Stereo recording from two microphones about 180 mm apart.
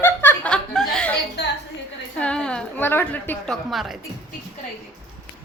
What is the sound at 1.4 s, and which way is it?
Speech, 65° left (ahead or behind).